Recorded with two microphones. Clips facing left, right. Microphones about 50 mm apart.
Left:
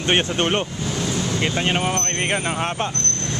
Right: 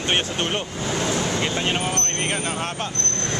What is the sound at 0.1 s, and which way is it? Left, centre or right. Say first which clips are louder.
Speech: left 4 dB; left.